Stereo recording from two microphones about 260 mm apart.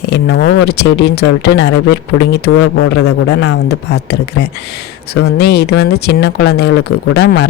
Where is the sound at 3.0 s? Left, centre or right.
Left.